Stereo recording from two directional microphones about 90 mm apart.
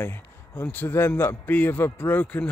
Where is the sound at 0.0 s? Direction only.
25° left (ahead or behind).